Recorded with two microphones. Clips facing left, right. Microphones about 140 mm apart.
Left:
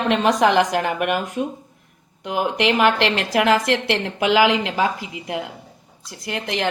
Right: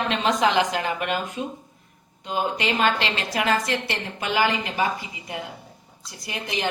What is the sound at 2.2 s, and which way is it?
A woman's voice, 70° left (ahead or behind).